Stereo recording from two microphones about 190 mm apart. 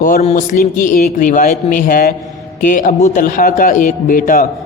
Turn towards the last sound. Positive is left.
turn(degrees=45)  # may be behind; listen again after turning